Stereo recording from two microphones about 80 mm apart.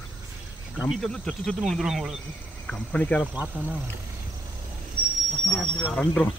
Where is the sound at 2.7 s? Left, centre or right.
Centre.